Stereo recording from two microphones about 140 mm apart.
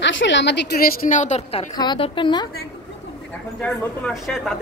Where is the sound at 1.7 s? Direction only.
35° left (ahead or behind).